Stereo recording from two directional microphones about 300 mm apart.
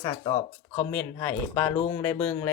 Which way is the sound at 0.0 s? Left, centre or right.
Centre.